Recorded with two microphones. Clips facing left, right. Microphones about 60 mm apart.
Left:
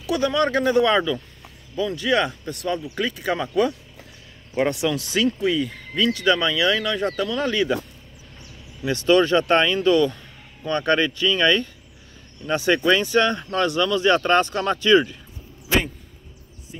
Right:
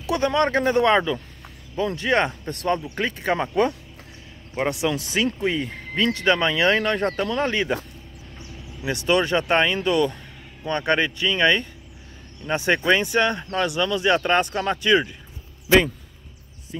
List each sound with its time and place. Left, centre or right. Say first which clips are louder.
0.0 s speech: even; right
4.6 s speech: left 1 dB; right
8.8 s speech: left 4 dB; centre